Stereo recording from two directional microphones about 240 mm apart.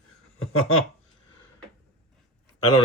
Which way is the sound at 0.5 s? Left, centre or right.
Left.